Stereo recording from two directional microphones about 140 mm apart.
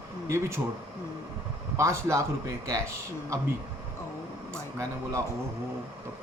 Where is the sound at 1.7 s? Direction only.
20° right (ahead or behind).